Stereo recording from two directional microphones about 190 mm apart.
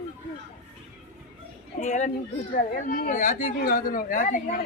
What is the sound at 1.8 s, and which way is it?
A man's voice, 40° left (ahead or behind).